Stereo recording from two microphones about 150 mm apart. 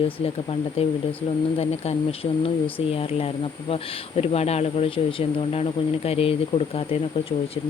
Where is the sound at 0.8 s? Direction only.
40° left (ahead or behind).